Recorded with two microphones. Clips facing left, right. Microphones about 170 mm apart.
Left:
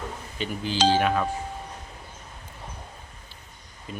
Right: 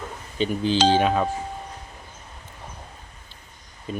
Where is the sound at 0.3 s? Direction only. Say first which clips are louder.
Right 6 dB; 20° right (ahead or behind).